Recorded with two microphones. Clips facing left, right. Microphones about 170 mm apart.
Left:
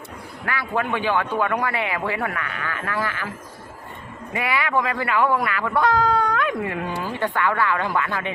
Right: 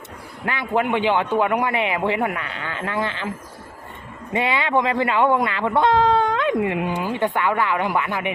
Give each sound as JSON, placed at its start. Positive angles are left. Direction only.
{"t": 0.4, "sound": "speech", "side_deg": -20}